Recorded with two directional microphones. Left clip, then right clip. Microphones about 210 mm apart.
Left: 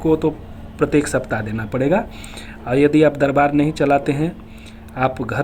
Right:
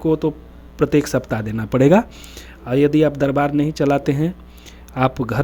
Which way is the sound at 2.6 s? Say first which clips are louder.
Left 2 dB; 45° right (ahead or behind).